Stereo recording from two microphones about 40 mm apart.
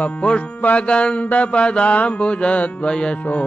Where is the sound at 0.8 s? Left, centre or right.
Left.